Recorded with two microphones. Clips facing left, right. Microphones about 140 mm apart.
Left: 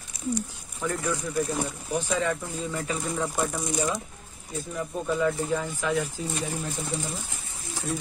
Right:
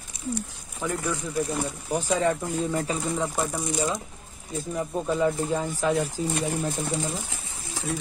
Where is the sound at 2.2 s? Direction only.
35° right (ahead or behind).